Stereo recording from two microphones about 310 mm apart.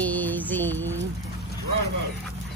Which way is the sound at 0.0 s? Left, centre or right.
Centre.